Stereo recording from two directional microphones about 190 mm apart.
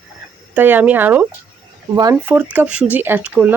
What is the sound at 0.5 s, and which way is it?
Speech, 10° right (ahead or behind).